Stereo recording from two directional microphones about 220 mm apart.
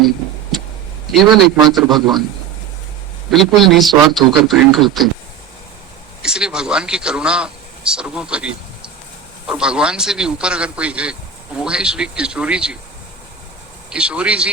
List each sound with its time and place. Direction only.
1.1 s a man's voice: centre (ahead or behind)
3.3 s a man's voice: centre (ahead or behind)
6.2 s a man's voice: 5° right (ahead or behind)
13.9 s a man's voice: 5° right (ahead or behind)